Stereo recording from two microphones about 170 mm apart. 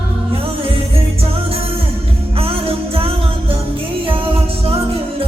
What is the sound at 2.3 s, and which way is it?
Music, 35° right (ahead or behind).